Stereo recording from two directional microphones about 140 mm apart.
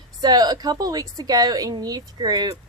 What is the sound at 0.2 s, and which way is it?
A woman's voice, 30° right (ahead or behind).